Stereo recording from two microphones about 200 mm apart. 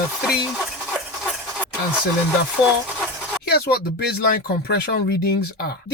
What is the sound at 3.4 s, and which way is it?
Speech, 55° left (ahead or behind).